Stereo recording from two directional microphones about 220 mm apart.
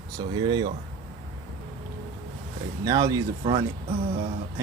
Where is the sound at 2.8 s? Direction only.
15° right (ahead or behind).